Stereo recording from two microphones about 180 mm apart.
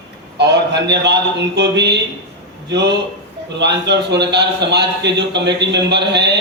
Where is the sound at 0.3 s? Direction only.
70° right (ahead or behind).